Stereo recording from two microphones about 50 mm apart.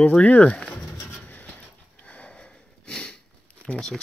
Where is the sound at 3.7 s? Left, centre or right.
Centre.